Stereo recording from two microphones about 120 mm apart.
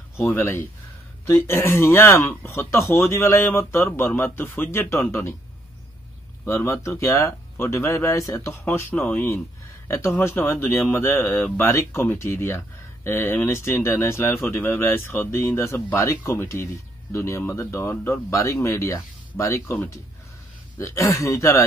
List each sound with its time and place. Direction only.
0.3 s speech: 20° left (ahead or behind)
6.4 s speech: 25° left (ahead or behind)